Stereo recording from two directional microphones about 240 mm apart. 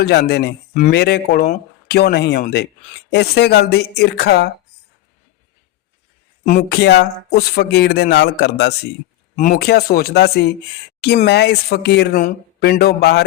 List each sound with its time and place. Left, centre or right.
0.0 s speech: left
6.4 s speech: left
9.3 s speech: left